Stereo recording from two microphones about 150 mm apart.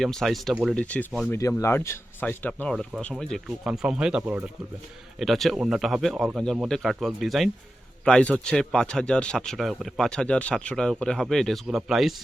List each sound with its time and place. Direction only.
0.0 s speech: centre (ahead or behind)
0.8 s speech: 10° left (ahead or behind)
1.3 s speech: 20° left (ahead or behind); by 12.1 s centre (ahead or behind)